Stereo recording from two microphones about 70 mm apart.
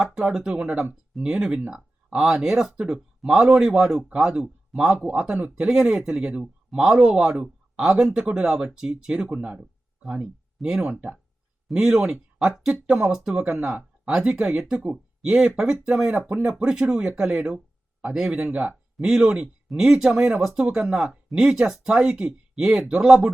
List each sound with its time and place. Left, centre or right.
0.0 s speech: centre
4.9 s speech: centre
13.3 s speech: right